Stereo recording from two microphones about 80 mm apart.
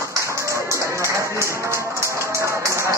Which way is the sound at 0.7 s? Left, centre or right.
Right.